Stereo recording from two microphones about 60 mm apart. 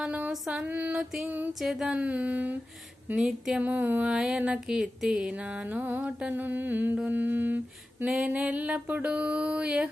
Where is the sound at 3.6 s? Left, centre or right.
Right.